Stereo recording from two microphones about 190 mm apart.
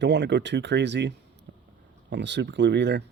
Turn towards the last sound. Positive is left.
turn(degrees=-65)  # may be behind; listen again after turning